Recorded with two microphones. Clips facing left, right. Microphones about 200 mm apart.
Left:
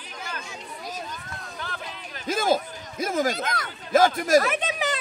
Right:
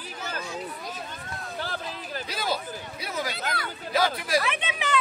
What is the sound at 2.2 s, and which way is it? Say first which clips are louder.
Speech: left 9 dB; 45° left (ahead or behind).